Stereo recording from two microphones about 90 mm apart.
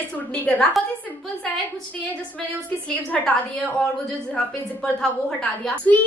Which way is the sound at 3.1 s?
5° left (ahead or behind).